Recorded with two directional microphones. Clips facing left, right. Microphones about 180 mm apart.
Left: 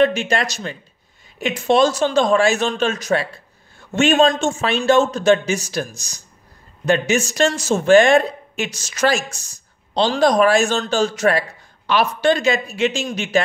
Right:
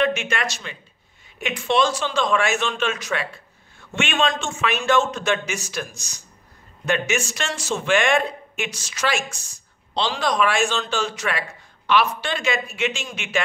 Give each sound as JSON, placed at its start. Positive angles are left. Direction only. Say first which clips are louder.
{"t": 0.0, "sound": "speech", "louder": "left 5 dB", "side_deg": 35}